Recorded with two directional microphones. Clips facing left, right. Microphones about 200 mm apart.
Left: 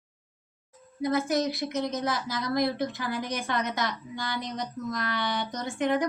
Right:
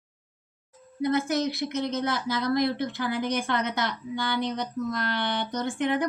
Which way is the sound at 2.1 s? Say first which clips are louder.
Right 3 dB; 60° right (ahead or behind).